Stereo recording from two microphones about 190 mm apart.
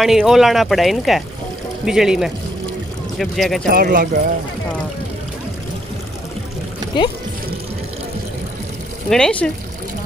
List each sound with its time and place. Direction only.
0.0 s speech: centre (ahead or behind)
3.7 s speech: 50° right (ahead or behind)
9.1 s speech: 5° left (ahead or behind)